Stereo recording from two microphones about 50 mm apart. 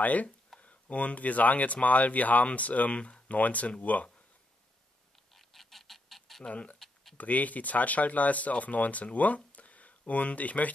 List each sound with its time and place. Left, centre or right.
0.0 s speech: left
5.3 s duck: centre
6.5 s speech: left
9.6 s a sound: left